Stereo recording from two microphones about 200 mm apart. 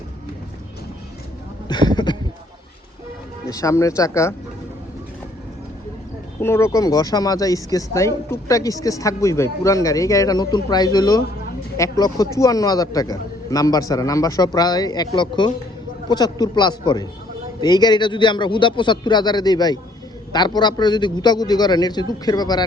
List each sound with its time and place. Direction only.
1.6 s a man's voice: 20° left (ahead or behind)
3.4 s speech: 15° left (ahead or behind)
6.4 s a man's voice: 15° left (ahead or behind)